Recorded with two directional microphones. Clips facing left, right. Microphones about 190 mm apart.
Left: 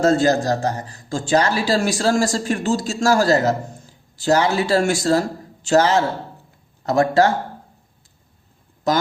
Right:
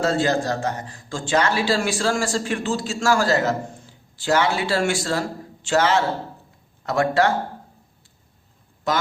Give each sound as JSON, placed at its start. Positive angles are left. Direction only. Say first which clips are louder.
{"t": 0.0, "sound": "a man's voice", "louder": "left 4 dB", "side_deg": 40}
{"t": 8.9, "sound": "a man's voice", "louder": "left 4 dB", "side_deg": 40}